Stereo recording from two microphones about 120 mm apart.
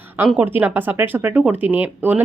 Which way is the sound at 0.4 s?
15° right (ahead or behind).